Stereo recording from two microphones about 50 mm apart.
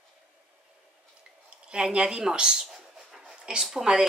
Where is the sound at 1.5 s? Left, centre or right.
Centre.